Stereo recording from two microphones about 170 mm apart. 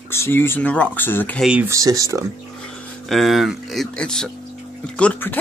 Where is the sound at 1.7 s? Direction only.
20° right (ahead or behind).